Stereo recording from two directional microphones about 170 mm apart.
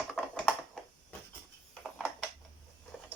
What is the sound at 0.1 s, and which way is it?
Typing, 5° left (ahead or behind).